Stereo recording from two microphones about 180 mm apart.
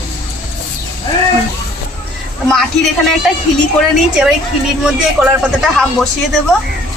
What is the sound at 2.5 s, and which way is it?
Speech, 5° left (ahead or behind).